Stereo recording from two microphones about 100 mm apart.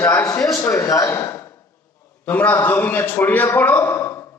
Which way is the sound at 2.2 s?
15° left (ahead or behind).